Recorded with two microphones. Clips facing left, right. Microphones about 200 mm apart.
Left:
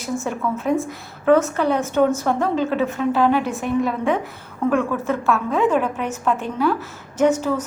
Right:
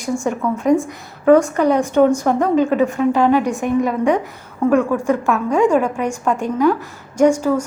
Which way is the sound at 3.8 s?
15° right (ahead or behind).